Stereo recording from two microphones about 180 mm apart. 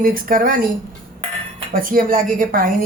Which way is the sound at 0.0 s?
50° right (ahead or behind).